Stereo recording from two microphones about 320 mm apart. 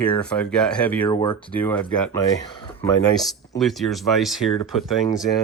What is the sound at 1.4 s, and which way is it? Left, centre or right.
Speech, centre.